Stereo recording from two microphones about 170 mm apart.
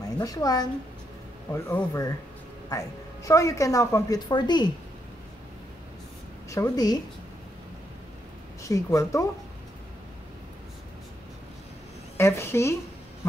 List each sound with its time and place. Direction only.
0.2 s a woman's voice: 20° left (ahead or behind)
3.3 s a woman's voice: 20° left (ahead or behind)
6.5 s a woman's voice: 20° left (ahead or behind)
8.6 s a woman's voice: 20° left (ahead or behind)
12.2 s speech: 15° left (ahead or behind)